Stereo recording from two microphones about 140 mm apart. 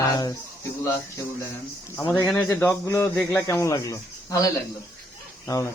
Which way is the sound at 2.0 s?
20° left (ahead or behind).